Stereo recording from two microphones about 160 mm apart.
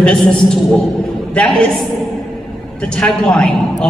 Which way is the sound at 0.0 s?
5° left (ahead or behind).